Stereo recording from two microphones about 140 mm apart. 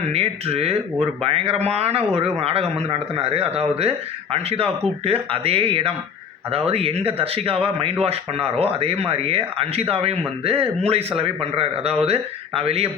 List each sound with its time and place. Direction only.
0.1 s speech: 45° right (ahead or behind)